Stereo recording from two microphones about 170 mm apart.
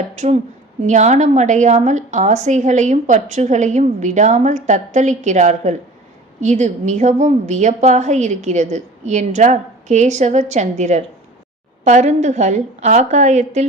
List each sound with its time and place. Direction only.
0.8 s a woman's voice: 45° right (ahead or behind)